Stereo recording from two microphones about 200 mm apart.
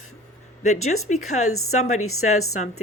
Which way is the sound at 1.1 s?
35° left (ahead or behind).